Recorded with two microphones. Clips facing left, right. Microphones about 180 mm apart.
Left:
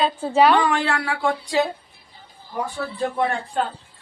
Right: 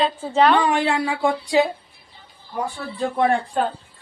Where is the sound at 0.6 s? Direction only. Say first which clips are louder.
Right 2 dB; 15° right (ahead or behind).